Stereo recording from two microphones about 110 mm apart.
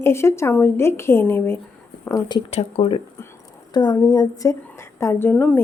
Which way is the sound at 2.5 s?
75° left (ahead or behind).